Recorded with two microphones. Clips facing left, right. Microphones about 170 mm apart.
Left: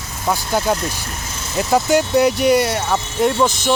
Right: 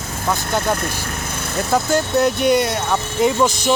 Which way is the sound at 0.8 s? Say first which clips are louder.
Right 1 dB; 55° right (ahead or behind).